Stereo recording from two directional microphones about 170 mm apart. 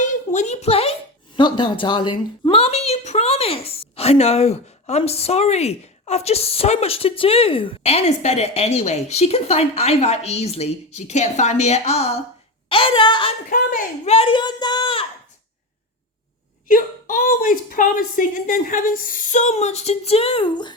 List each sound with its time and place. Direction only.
0.0 s a sound: 45° left (ahead or behind)
1.4 s a woman's voice: 30° left (ahead or behind)
13.5 s speech: 55° left (ahead or behind)
14.0 s speech: 35° left (ahead or behind)
16.6 s speech: 55° left (ahead or behind); by 20.7 s 25° left (ahead or behind)